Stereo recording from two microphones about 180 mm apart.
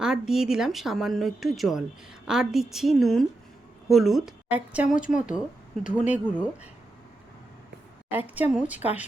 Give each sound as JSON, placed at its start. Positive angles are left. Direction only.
{"t": 0.0, "sound": "a woman's voice", "side_deg": -5}
{"t": 4.9, "sound": "speech", "side_deg": 45}
{"t": 5.9, "sound": "a woman's voice", "side_deg": -5}
{"t": 8.1, "sound": "a woman's voice", "side_deg": -10}